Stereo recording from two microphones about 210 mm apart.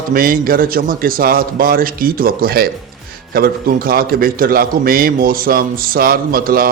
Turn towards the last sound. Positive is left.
turn(degrees=-45)  # may be behind; listen again after turning